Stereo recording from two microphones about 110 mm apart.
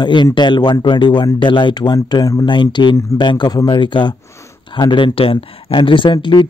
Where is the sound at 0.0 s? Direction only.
45° left (ahead or behind).